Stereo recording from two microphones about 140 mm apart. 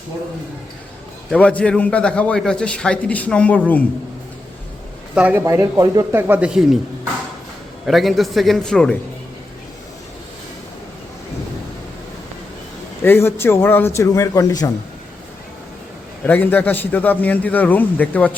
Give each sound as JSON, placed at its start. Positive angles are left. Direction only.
{"t": 1.3, "sound": "a man's voice", "side_deg": 10}
{"t": 5.1, "sound": "a man's voice", "side_deg": -15}
{"t": 13.0, "sound": "a man's voice", "side_deg": 15}
{"t": 16.2, "sound": "a man's voice", "side_deg": 10}